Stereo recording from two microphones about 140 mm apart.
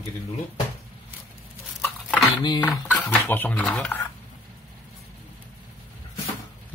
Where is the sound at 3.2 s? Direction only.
15° left (ahead or behind).